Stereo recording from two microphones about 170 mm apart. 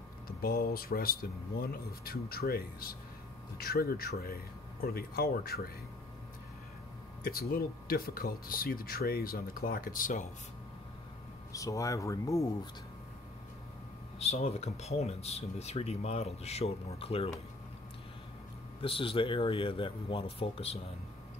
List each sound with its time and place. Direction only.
0.4 s speech: 65° left (ahead or behind)
7.2 s speech: 60° left (ahead or behind)
11.5 s speech: 20° left (ahead or behind)
14.1 s speech: 40° left (ahead or behind)
18.8 s speech: 30° left (ahead or behind)